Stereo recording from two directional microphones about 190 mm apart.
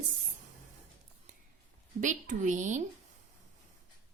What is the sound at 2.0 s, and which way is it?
Speech, 40° right (ahead or behind).